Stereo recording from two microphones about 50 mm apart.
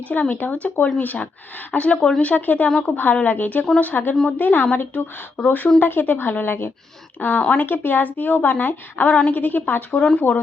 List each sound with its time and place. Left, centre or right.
0.1 s a woman's voice: left
9.1 s a woman's voice: left
9.4 s a woman's voice: left